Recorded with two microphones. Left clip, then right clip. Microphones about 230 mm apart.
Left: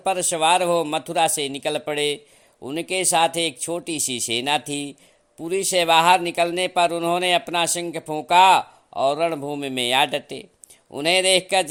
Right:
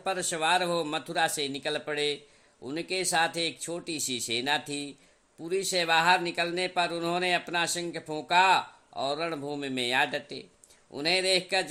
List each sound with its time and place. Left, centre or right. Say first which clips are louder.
0.0 s speech: left 9 dB; left